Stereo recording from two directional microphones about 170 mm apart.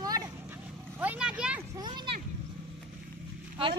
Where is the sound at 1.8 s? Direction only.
25° right (ahead or behind).